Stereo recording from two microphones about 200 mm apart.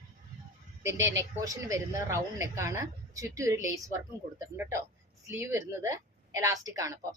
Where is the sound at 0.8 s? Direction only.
15° right (ahead or behind).